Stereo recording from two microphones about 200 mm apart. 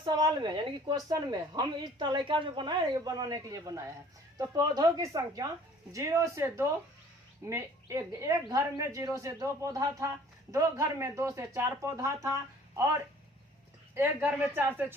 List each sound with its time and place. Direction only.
0.0 s a woman's voice: 20° right (ahead or behind)